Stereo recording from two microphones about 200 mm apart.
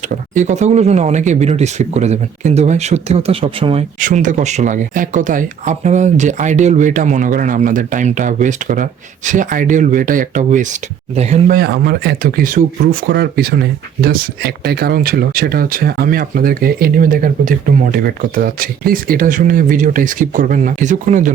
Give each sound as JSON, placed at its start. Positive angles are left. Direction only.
{"t": 0.3, "sound": "speech", "side_deg": -35}
{"t": 4.0, "sound": "speech", "side_deg": -40}